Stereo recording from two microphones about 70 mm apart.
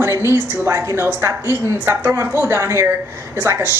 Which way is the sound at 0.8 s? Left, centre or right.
Right.